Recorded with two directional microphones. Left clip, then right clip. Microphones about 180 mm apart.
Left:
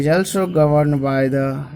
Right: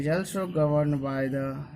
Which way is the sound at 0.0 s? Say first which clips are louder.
Left 11 dB; 35° left (ahead or behind).